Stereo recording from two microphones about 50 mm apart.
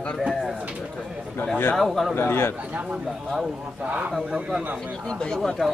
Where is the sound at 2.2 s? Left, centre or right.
Left.